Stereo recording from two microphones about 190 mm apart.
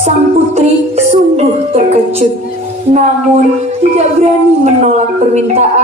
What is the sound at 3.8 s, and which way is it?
Music, 35° right (ahead or behind).